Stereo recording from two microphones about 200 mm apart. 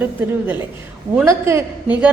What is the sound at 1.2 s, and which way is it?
Speech, 15° right (ahead or behind).